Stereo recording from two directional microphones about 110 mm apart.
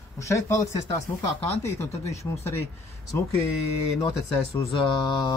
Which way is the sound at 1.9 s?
75° left (ahead or behind).